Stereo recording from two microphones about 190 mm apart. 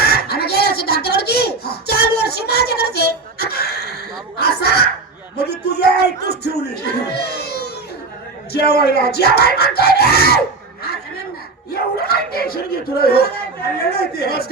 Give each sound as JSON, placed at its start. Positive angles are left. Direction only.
{"t": 0.0, "sound": "a sound", "side_deg": 55}
{"t": 8.5, "sound": "speech", "side_deg": 55}
{"t": 11.7, "sound": "dog", "side_deg": 55}
{"t": 13.9, "sound": "speech", "side_deg": 55}